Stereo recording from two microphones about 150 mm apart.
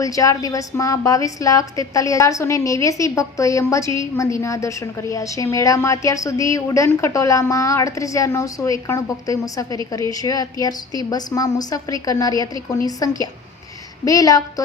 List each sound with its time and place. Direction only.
0.0 s a woman's voice: 20° left (ahead or behind)